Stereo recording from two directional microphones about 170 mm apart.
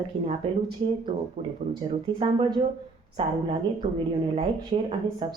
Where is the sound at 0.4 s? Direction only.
30° right (ahead or behind).